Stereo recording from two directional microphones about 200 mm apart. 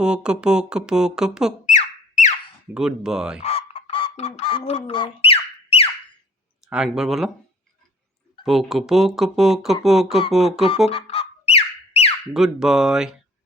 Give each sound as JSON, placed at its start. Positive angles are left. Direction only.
{"t": 0.0, "sound": "speech", "side_deg": -5}
{"t": 1.6, "sound": "a sound", "side_deg": 35}
{"t": 2.7, "sound": "speech", "side_deg": -5}
{"t": 3.4, "sound": "bird", "side_deg": 30}
{"t": 6.7, "sound": "speech", "side_deg": -5}
{"t": 8.4, "sound": "speech", "side_deg": 0}
{"t": 10.8, "sound": "music", "side_deg": 30}
{"t": 12.3, "sound": "speech", "side_deg": 0}